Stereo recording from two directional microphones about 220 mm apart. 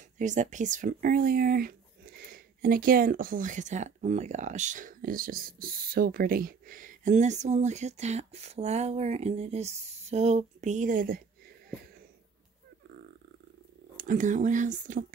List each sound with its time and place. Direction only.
0.2 s speech: 35° right (ahead or behind)
13.9 s speech: 35° right (ahead or behind)